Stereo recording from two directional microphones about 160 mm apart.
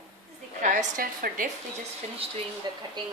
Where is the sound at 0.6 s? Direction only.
50° right (ahead or behind).